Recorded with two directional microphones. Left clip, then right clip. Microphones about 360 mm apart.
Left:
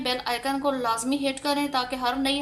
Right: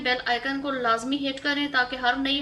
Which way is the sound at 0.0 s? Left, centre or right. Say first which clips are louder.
Right 2 dB; centre.